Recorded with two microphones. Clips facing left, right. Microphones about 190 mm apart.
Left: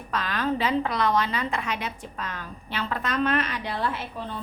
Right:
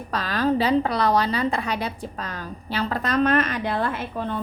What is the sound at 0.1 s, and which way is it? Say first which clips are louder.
A woman's voice: right 4 dB; 35° right (ahead or behind).